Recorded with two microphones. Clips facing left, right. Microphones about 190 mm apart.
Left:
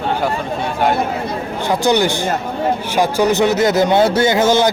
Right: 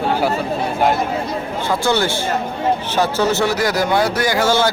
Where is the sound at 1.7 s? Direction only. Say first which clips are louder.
Left 4 dB; 15° left (ahead or behind).